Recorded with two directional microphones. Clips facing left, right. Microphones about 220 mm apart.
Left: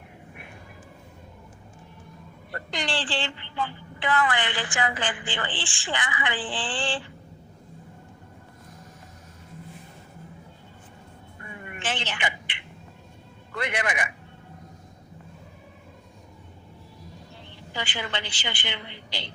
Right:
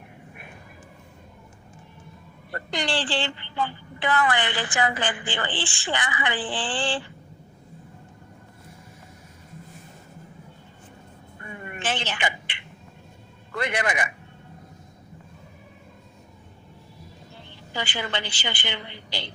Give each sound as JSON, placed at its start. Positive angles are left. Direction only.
{"t": 2.7, "sound": "a woman's voice", "side_deg": -35}
{"t": 11.8, "sound": "a sound", "side_deg": -40}
{"t": 13.6, "sound": "a woman's voice", "side_deg": -40}
{"t": 17.7, "sound": "a woman's voice", "side_deg": -35}